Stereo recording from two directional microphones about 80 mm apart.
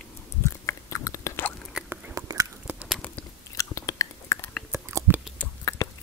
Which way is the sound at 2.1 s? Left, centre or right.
Right.